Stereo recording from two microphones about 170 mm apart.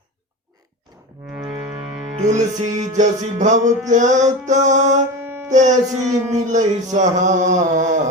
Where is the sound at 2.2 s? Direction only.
45° right (ahead or behind).